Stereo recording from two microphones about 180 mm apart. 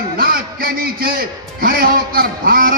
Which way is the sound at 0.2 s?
55° right (ahead or behind).